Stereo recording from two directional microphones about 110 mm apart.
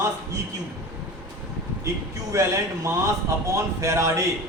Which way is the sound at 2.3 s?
30° right (ahead or behind).